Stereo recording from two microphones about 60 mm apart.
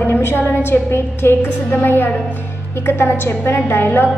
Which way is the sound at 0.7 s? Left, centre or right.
Left.